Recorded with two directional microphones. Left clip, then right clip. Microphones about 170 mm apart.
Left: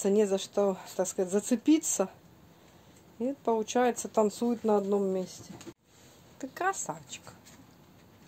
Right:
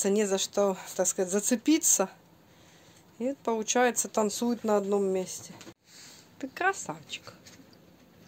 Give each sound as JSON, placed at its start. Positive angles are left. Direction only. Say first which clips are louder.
{"t": 0.0, "sound": "speech", "louder": "even", "side_deg": -5}
{"t": 3.2, "sound": "speech", "louder": "left 1 dB", "side_deg": -5}
{"t": 4.6, "sound": "speech", "louder": "right 1 dB", "side_deg": -15}
{"t": 6.3, "sound": "speech", "louder": "right 2 dB", "side_deg": 10}